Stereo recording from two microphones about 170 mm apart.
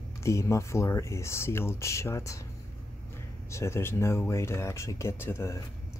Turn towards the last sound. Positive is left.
turn(degrees=15)  # may be behind; listen again after turning